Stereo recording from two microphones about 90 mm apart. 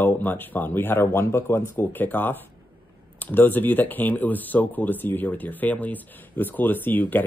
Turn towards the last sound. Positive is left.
turn(degrees=20)  # may be behind; listen again after turning